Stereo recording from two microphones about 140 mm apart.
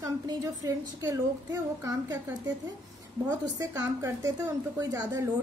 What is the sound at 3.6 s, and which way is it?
A woman's voice, 20° right (ahead or behind).